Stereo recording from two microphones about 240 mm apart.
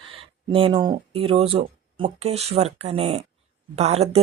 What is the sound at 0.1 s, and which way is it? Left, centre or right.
Speech, right.